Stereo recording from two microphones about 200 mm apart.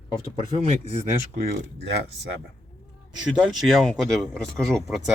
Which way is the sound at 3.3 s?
Centre (ahead or behind).